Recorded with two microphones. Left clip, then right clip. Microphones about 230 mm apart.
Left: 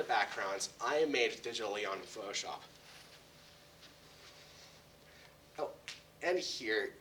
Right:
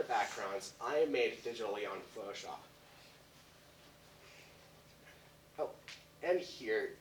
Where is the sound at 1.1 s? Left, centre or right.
Left.